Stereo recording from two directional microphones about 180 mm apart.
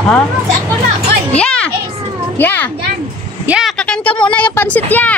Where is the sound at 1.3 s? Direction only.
5° left (ahead or behind).